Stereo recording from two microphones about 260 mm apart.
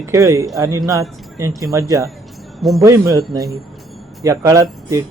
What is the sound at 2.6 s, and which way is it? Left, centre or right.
Speech, centre.